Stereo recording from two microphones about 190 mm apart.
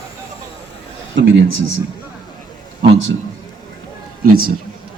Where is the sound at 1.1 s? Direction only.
70° right (ahead or behind).